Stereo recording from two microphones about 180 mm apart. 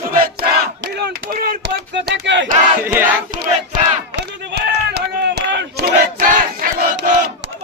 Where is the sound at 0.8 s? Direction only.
60° right (ahead or behind).